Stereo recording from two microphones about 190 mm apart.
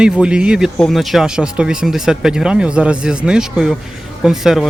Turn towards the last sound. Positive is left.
turn(degrees=0)  # may be behind; listen again after turning